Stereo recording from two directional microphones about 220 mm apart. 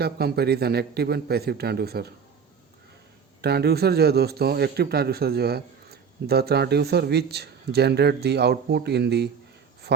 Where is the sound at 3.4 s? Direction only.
45° right (ahead or behind).